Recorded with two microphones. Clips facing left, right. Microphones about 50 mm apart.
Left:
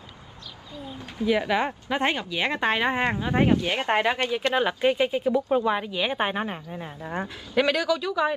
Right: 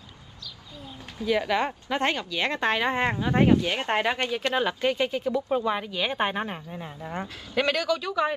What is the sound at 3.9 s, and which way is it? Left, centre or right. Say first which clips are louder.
Speech: left 3 dB; centre.